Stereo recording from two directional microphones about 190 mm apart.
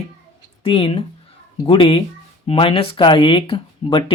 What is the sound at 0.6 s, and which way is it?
Speech, 30° left (ahead or behind).